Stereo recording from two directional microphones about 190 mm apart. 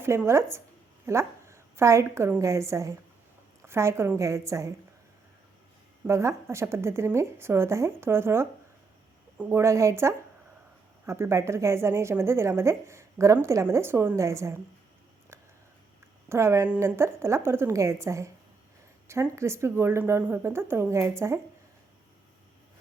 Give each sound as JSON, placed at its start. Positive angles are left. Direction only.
{"t": 0.0, "sound": "a woman's voice", "side_deg": -15}
{"t": 6.1, "sound": "speech", "side_deg": -15}
{"t": 16.3, "sound": "speech", "side_deg": -15}